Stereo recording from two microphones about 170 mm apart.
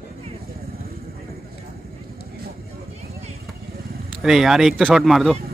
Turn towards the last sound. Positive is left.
turn(degrees=0)  # may be behind; listen again after turning